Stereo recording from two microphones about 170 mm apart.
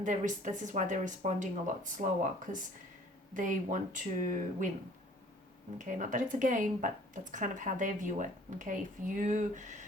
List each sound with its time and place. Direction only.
0.0 s speech: 45° right (ahead or behind)
5.7 s speech: 50° right (ahead or behind)